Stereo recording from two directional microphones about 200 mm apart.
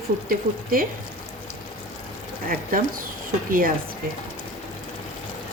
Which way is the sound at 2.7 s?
45° right (ahead or behind).